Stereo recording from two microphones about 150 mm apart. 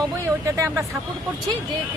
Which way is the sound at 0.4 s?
20° right (ahead or behind).